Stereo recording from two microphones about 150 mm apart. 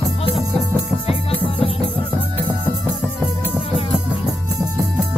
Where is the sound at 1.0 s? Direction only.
40° left (ahead or behind).